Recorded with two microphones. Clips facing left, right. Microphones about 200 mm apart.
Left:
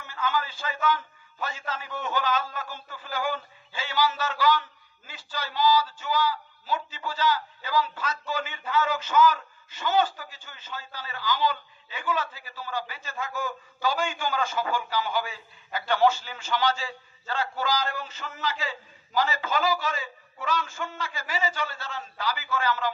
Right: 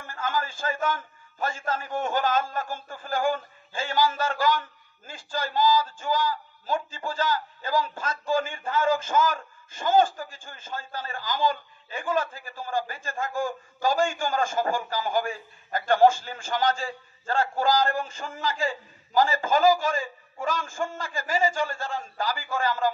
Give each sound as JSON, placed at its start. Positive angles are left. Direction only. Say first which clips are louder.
{"t": 0.0, "sound": "a man's voice", "louder": "even", "side_deg": -50}